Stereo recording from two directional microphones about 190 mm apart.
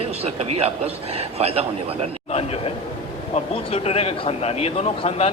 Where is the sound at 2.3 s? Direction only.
30° left (ahead or behind).